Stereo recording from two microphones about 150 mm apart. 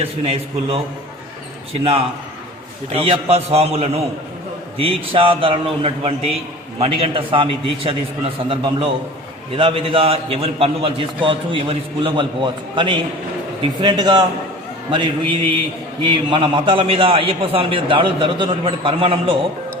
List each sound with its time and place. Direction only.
0.0 s a man's voice: 40° right (ahead or behind)
1.8 s a man's voice: 40° right (ahead or behind)